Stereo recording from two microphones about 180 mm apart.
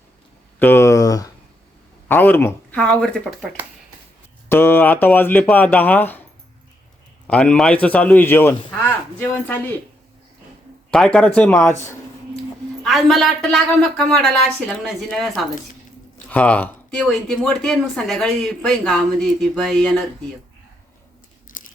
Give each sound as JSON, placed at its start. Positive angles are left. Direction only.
{"t": 0.6, "sound": "speech", "side_deg": 15}
{"t": 7.3, "sound": "speech", "side_deg": 5}
{"t": 10.9, "sound": "speech", "side_deg": 5}
{"t": 12.8, "sound": "speech", "side_deg": 0}
{"t": 21.6, "sound": "crunch", "side_deg": 45}